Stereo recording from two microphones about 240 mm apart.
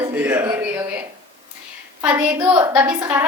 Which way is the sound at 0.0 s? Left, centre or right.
Centre.